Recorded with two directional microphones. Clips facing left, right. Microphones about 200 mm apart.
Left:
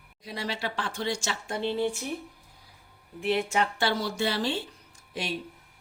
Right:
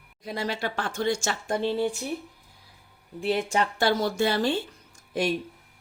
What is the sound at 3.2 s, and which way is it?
A woman's voice, 40° right (ahead or behind).